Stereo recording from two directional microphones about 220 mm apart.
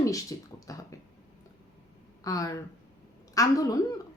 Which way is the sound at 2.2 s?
15° left (ahead or behind).